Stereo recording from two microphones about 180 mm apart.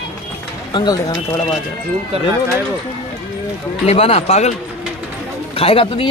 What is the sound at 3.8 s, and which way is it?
Speech, 35° left (ahead or behind).